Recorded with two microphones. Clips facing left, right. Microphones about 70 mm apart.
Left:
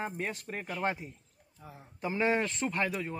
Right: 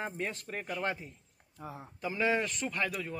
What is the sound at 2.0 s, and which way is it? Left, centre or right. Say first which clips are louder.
A man's voice: left 1 dB; left.